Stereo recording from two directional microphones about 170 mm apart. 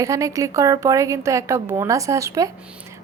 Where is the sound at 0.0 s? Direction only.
20° right (ahead or behind).